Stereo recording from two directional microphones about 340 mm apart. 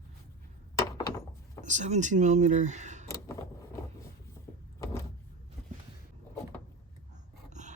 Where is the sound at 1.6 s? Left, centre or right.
Right.